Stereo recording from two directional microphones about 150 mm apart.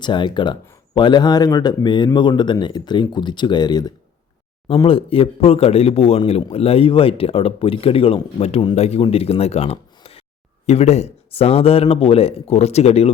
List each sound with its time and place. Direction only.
0.0 s a man's voice: 30° left (ahead or behind)